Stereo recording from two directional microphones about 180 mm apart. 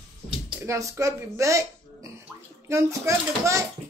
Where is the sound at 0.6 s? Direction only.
15° right (ahead or behind).